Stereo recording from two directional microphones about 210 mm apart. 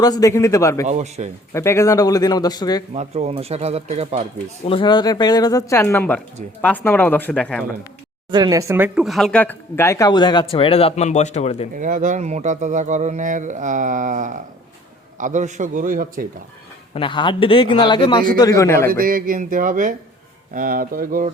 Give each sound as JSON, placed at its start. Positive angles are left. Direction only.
{"t": 0.0, "sound": "speech", "side_deg": 15}
{"t": 0.9, "sound": "speech", "side_deg": -30}
{"t": 1.5, "sound": "speech", "side_deg": 15}
{"t": 2.9, "sound": "speech", "side_deg": -30}
{"t": 4.6, "sound": "speech", "side_deg": 25}
{"t": 8.3, "sound": "speech", "side_deg": -20}
{"t": 11.7, "sound": "speech", "side_deg": -40}
{"t": 16.9, "sound": "a man's voice", "side_deg": 25}
{"t": 18.9, "sound": "speech", "side_deg": -40}